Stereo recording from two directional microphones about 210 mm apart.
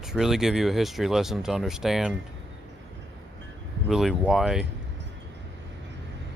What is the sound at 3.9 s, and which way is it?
Speech, centre (ahead or behind).